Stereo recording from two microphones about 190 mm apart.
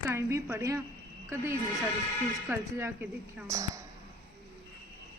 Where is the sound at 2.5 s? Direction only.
10° right (ahead or behind).